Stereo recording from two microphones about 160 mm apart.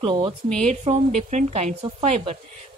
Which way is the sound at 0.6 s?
45° right (ahead or behind).